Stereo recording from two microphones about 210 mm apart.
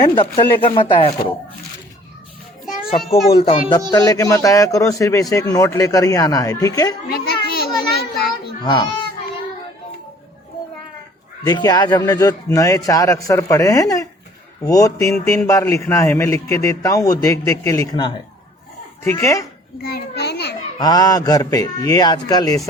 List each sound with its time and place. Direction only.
0.2 s speech: 25° left (ahead or behind)
3.3 s speech: 25° left (ahead or behind)
3.9 s a man's voice: 15° left (ahead or behind)
7.5 s a sound: 50° left (ahead or behind)
8.6 s speech: 20° left (ahead or behind)
11.4 s a man's voice: 20° left (ahead or behind)
19.9 s a child's voice: 50° left (ahead or behind)
20.7 s a man's voice: 20° left (ahead or behind)